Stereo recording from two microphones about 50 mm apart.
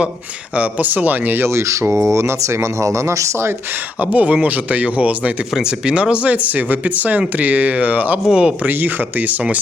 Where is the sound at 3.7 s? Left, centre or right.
Right.